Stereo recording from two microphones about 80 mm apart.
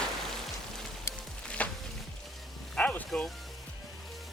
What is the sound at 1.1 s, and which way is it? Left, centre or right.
Music, left.